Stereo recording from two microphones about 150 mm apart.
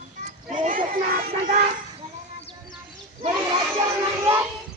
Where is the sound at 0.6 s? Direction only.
65° right (ahead or behind).